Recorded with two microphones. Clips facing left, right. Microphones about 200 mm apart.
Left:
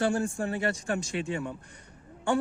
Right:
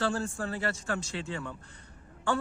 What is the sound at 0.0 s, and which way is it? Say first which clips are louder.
A man's voice: left 4 dB; 15° left (ahead or behind).